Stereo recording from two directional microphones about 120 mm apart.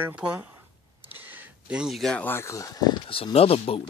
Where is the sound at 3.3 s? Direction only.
55° left (ahead or behind).